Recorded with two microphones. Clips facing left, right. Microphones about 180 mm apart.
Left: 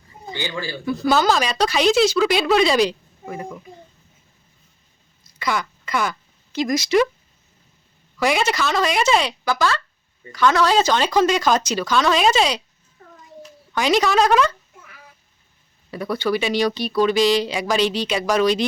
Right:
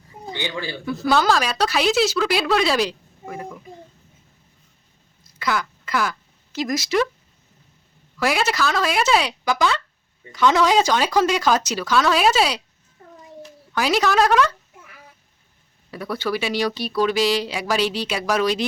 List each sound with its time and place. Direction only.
0.3 s speech: 20° right (ahead or behind)
0.9 s speech: centre (ahead or behind)
5.4 s quack: centre (ahead or behind)
8.2 s speech: centre (ahead or behind)
9.4 s speech: 15° right (ahead or behind)
13.7 s speech: 5° right (ahead or behind)
15.9 s speech: 5° right (ahead or behind)